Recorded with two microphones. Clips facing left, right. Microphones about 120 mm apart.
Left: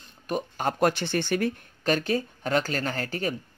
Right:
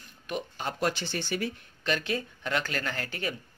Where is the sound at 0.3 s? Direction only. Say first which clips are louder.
Left 6 dB; 50° left (ahead or behind).